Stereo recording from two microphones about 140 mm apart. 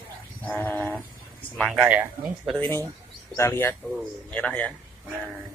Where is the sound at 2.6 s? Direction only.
15° left (ahead or behind).